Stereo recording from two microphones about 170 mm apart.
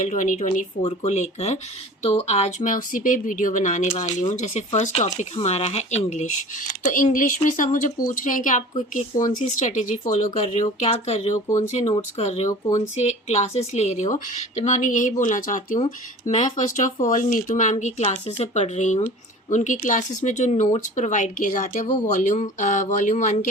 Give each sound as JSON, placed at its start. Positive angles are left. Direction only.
{"t": 0.0, "sound": "speech", "side_deg": 50}